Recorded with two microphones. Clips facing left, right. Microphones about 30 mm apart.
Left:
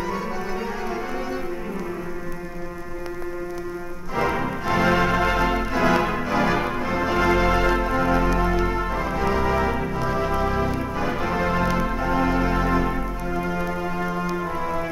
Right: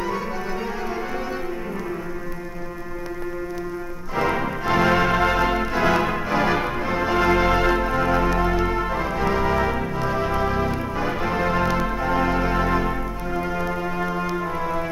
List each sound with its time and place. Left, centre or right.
4.2 s music: centre